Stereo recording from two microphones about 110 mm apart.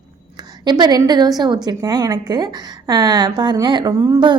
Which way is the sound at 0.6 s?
40° right (ahead or behind).